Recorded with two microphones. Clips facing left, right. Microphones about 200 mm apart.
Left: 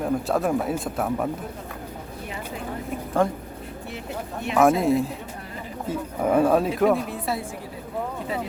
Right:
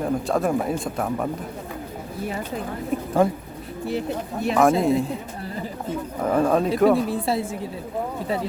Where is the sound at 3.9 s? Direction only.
35° right (ahead or behind).